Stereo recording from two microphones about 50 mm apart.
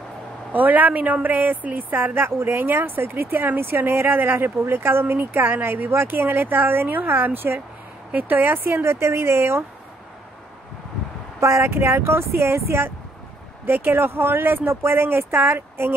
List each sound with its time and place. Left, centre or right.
0.5 s a woman's voice: right
2.1 s speech: right
8.1 s speech: right
11.3 s speech: right